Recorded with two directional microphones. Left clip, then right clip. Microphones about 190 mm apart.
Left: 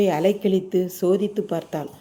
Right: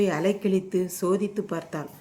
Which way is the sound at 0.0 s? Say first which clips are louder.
Left 5 dB; 10° left (ahead or behind).